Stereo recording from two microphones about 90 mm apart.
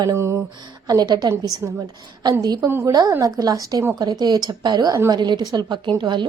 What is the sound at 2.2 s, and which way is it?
Speech, 45° right (ahead or behind).